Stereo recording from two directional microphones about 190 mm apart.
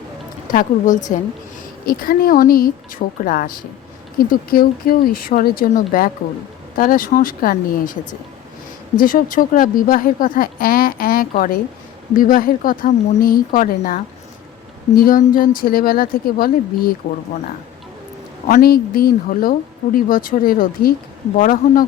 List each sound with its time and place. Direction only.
0.5 s speech: 40° left (ahead or behind)
9.0 s speech: 45° left (ahead or behind)
18.4 s speech: 50° left (ahead or behind)